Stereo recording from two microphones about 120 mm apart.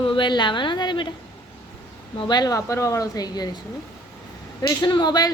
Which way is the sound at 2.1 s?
40° left (ahead or behind).